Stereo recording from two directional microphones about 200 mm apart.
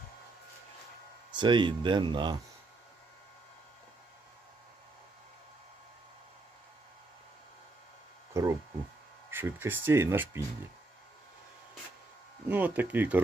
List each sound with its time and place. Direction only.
1.3 s speech: 25° right (ahead or behind)
8.3 s a sound: 15° right (ahead or behind)
9.3 s speech: 10° right (ahead or behind)
12.5 s speech: 10° right (ahead or behind)